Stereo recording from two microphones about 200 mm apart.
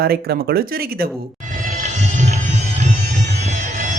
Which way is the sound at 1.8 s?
35° right (ahead or behind).